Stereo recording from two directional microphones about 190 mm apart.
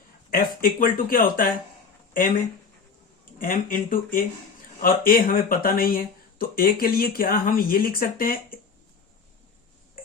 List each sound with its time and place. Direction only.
0.3 s speech: 50° left (ahead or behind)
3.3 s speech: 45° left (ahead or behind)